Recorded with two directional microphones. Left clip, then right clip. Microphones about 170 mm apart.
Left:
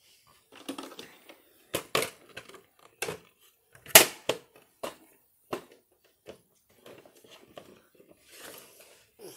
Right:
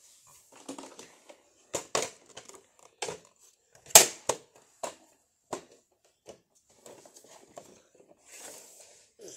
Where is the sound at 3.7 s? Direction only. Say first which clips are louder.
Left 1 dB; 20° left (ahead or behind).